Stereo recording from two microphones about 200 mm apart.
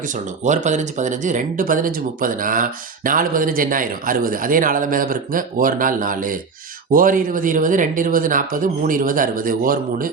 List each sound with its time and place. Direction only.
0.4 s speech: 35° right (ahead or behind)